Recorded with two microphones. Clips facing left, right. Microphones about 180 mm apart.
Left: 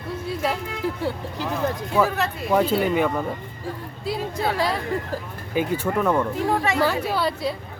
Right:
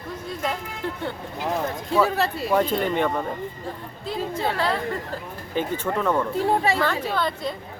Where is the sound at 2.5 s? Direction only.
10° left (ahead or behind).